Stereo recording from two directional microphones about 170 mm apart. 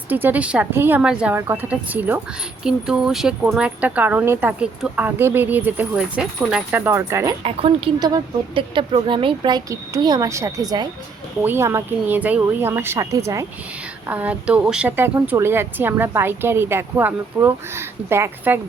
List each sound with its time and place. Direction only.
0.1 s speech: 10° right (ahead or behind)
7.4 s speech: 30° right (ahead or behind); by 18.6 s 15° right (ahead or behind)